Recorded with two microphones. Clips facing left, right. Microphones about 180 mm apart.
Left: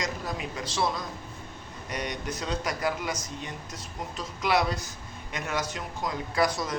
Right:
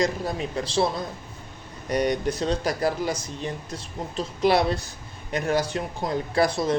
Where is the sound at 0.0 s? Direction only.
30° right (ahead or behind).